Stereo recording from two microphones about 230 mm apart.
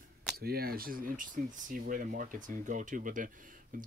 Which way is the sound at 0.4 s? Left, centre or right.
Right.